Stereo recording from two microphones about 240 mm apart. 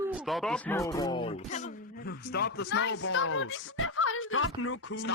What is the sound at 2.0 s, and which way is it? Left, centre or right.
Speech, left.